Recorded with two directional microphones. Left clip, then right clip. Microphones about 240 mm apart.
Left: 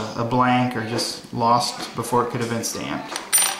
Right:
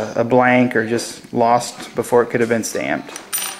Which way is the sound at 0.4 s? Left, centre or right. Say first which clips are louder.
Right 5 dB; centre.